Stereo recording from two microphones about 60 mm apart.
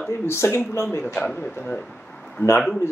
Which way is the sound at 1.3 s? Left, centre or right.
Left.